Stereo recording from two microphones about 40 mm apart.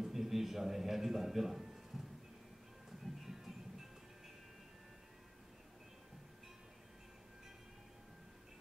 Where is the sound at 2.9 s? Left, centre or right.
Centre.